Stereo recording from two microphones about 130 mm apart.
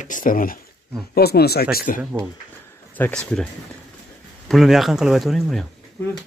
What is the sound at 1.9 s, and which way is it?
Speech, 90° left.